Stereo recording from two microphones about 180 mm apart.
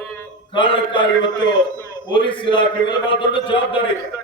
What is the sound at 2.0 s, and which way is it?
A man's voice, 25° left (ahead or behind).